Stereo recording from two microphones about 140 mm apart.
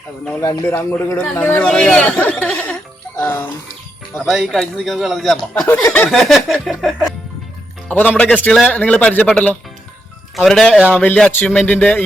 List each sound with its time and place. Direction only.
0.3 s a man's voice: 15° left (ahead or behind)
4.3 s a man's voice: centre (ahead or behind)
7.9 s a man's voice: 10° left (ahead or behind)